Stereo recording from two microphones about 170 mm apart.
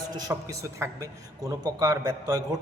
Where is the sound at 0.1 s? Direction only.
20° right (ahead or behind).